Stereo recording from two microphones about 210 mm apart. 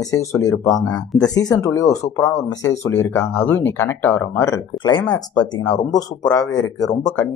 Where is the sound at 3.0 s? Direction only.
10° left (ahead or behind).